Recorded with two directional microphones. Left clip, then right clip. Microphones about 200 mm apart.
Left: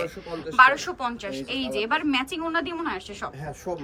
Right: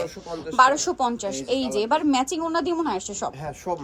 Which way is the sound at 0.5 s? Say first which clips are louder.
Even; 25° right (ahead or behind).